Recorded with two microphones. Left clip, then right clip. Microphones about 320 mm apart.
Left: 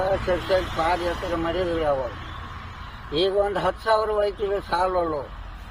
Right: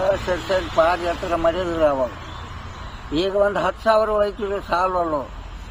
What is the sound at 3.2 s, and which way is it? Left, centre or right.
Speech, centre.